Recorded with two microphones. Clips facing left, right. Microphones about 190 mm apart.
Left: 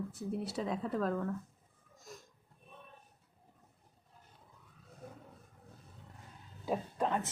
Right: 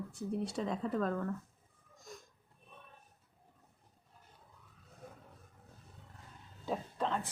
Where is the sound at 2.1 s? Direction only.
Centre (ahead or behind).